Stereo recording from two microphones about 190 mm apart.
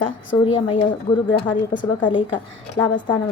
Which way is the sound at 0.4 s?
25° left (ahead or behind).